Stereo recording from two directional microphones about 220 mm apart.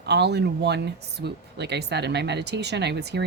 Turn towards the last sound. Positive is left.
turn(degrees=-50)  # may be behind; listen again after turning